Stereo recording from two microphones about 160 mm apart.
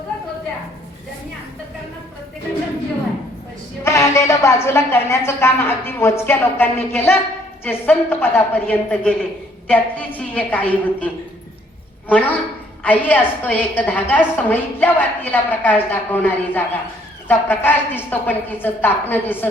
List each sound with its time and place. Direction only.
3.8 s a woman's voice: 15° left (ahead or behind)